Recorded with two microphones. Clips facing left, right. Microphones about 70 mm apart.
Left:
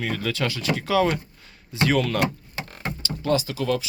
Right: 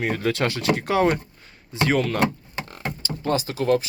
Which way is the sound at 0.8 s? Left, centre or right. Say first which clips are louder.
Left 5 dB; right.